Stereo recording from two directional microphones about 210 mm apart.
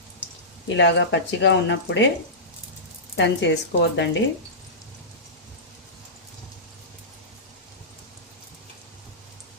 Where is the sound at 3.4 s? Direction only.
55° left (ahead or behind).